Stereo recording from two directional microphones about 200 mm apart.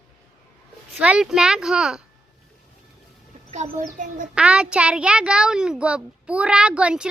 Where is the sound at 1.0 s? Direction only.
5° right (ahead or behind).